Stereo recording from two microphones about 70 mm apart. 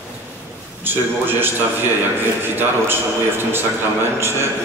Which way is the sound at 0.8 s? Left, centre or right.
Right.